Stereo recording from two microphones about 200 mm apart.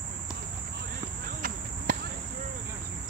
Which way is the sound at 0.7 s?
45° right (ahead or behind).